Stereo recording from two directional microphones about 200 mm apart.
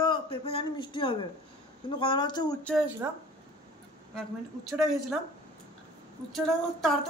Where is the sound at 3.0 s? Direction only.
10° right (ahead or behind).